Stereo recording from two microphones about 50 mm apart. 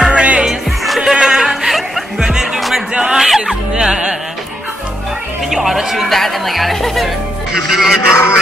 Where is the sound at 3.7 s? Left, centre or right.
Centre.